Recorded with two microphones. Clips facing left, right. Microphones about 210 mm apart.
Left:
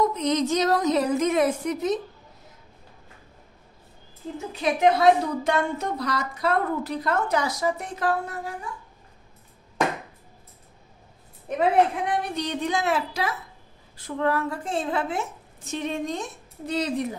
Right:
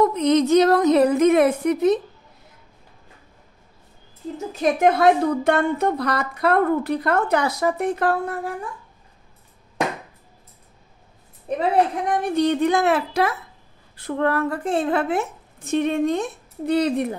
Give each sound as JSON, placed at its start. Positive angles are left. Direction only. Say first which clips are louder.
{"t": 0.0, "sound": "a woman's voice", "louder": "right 6 dB", "side_deg": -60}
{"t": 4.5, "sound": "a woman's voice", "louder": "right 3 dB", "side_deg": -45}
{"t": 12.1, "sound": "a woman's voice", "louder": "right 8 dB", "side_deg": -50}